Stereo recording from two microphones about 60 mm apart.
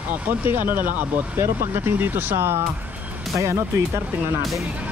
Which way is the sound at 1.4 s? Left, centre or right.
Right.